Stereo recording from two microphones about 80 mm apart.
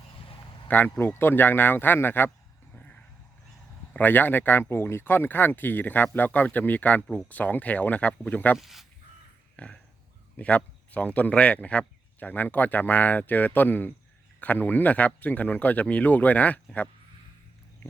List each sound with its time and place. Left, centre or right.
0.9 s a man's voice: left
2.7 s vehicle: centre
3.9 s a man's voice: left
8.5 s speech: centre
9.6 s a man's voice: centre